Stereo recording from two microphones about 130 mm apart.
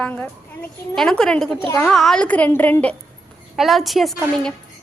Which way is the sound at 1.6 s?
20° left (ahead or behind).